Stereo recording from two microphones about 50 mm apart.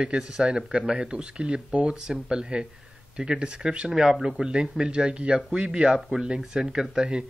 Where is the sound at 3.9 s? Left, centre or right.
Centre.